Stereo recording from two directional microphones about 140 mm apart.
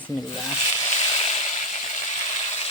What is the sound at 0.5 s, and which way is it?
Frying, 40° left (ahead or behind).